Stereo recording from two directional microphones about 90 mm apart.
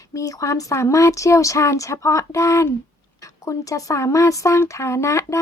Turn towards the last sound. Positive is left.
turn(degrees=35)  # may be behind; listen again after turning